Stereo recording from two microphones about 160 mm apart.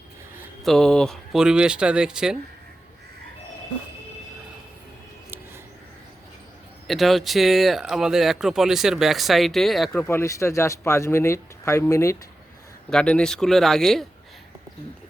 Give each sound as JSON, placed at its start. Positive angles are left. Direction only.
{"t": 0.6, "sound": "speech", "side_deg": 5}
{"t": 6.8, "sound": "speech", "side_deg": 0}
{"t": 9.9, "sound": "speech", "side_deg": 15}
{"t": 12.9, "sound": "speech", "side_deg": 5}